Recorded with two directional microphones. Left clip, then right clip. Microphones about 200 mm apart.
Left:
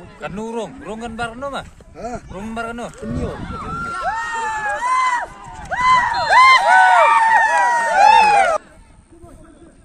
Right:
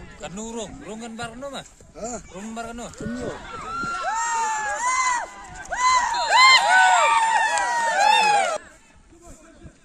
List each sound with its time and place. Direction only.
0.2 s speech: 20° left (ahead or behind)
2.0 s speech: 70° right (ahead or behind)
2.4 s speech: 20° left (ahead or behind)
4.0 s crowd: 35° left (ahead or behind)
5.7 s a sound: 35° left (ahead or behind)